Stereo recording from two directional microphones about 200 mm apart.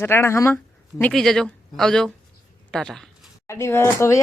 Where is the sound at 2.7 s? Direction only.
5° left (ahead or behind).